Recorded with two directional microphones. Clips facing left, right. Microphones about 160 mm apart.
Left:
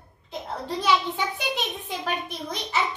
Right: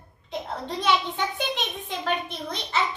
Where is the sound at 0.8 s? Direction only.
10° left (ahead or behind).